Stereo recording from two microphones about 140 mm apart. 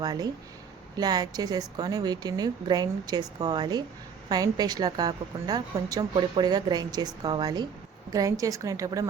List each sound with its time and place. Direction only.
0.0 s a woman's voice: 25° right (ahead or behind)